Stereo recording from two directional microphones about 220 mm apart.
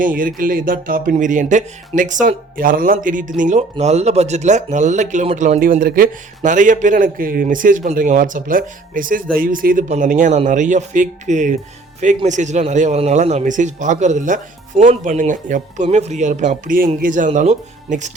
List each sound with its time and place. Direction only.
0.0 s speech: 40° right (ahead or behind)